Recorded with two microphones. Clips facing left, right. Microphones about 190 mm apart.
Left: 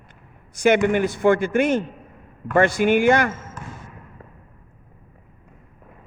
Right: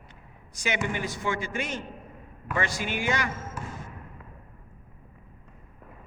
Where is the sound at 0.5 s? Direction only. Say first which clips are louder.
Left 13 dB; 55° left (ahead or behind).